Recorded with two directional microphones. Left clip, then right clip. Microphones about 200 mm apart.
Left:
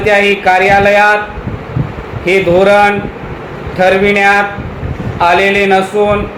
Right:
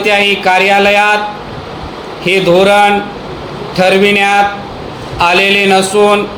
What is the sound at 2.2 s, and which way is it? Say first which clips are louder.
A man's voice: even; 40° right (ahead or behind).